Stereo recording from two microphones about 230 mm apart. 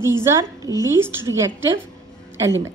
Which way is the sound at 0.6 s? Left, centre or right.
Centre.